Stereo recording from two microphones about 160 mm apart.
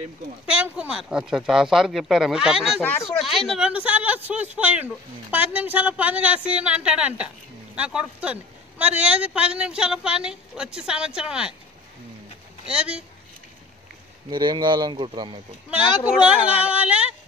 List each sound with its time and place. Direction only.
0.5 s a woman's voice: 5° right (ahead or behind)
12.6 s speech: 5° right (ahead or behind)
14.3 s speech: 30° right (ahead or behind)
15.8 s speech: 30° left (ahead or behind)
16.3 s speech: 10° right (ahead or behind)